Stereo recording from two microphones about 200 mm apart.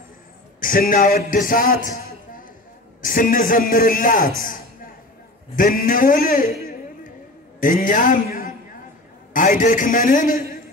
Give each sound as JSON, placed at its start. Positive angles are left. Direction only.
{"t": 0.6, "sound": "a man's voice", "side_deg": 45}
{"t": 3.0, "sound": "a man's voice", "side_deg": 45}
{"t": 4.4, "sound": "a sound", "side_deg": 45}
{"t": 5.6, "sound": "a man's voice", "side_deg": 45}
{"t": 7.6, "sound": "a man's voice", "side_deg": 40}